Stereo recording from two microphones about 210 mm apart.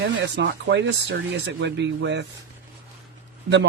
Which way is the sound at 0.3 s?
55° right (ahead or behind).